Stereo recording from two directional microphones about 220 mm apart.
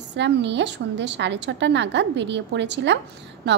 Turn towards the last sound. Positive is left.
turn(degrees=-50)  # may be behind; listen again after turning